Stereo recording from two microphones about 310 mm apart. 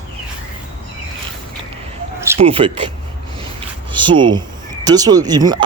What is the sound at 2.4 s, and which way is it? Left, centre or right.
Speech, centre.